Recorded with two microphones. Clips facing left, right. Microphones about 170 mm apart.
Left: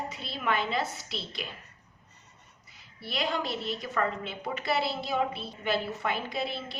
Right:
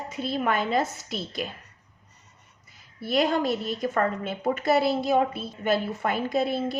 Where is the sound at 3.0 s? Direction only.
45° right (ahead or behind).